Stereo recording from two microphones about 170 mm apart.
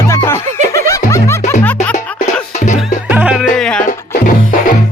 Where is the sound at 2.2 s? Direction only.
45° left (ahead or behind).